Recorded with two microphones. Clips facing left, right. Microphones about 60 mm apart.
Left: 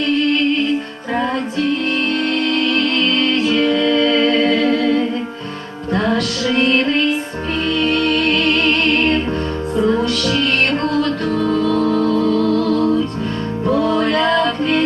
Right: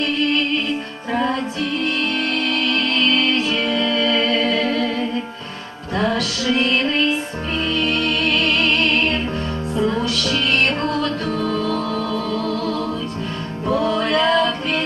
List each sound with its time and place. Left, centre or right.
2.5 s music: left
3.8 s music: centre
4.4 s music: left
5.9 s music: centre
7.9 s music: centre
9.7 s music: centre
10.9 s music: left
11.5 s music: centre
12.0 s music: left
12.5 s music: centre
13.7 s music: centre